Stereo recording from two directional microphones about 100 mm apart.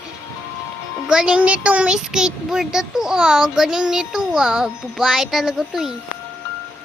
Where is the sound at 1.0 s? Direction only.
10° right (ahead or behind).